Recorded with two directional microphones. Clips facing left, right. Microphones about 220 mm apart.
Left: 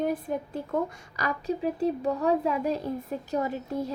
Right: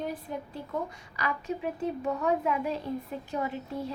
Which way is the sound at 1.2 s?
35° left (ahead or behind).